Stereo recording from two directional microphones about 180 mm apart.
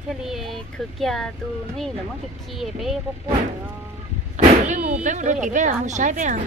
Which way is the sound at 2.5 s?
Centre (ahead or behind).